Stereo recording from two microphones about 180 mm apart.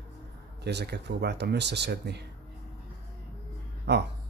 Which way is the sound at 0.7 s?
70° right (ahead or behind).